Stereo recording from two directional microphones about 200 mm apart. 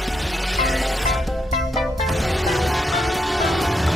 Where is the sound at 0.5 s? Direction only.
Centre (ahead or behind).